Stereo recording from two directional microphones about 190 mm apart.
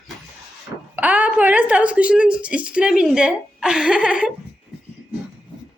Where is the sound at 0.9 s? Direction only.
10° right (ahead or behind).